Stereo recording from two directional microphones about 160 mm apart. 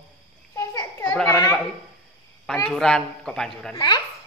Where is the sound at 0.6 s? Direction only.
15° left (ahead or behind).